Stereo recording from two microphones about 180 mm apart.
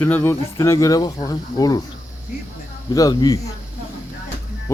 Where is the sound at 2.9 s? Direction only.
20° left (ahead or behind).